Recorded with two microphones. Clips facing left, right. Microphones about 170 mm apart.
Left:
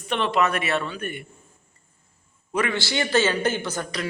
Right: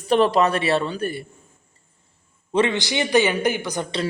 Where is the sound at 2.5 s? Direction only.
20° right (ahead or behind).